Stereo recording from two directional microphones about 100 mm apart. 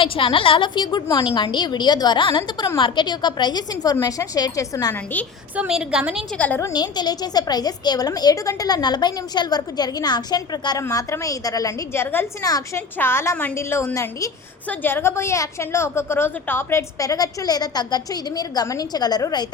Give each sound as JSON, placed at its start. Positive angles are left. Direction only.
{"t": 0.0, "sound": "a woman's voice", "side_deg": 60}
{"t": 5.5, "sound": "a woman's voice", "side_deg": -5}
{"t": 6.3, "sound": "a woman's voice", "side_deg": 15}
{"t": 6.6, "sound": "a woman's voice", "side_deg": 45}
{"t": 10.8, "sound": "a woman's voice", "side_deg": 30}
{"t": 11.9, "sound": "a woman's voice", "side_deg": 25}
{"t": 12.4, "sound": "a woman's voice", "side_deg": 40}
{"t": 12.7, "sound": "a woman's voice", "side_deg": 25}
{"t": 17.0, "sound": "a woman's voice", "side_deg": 35}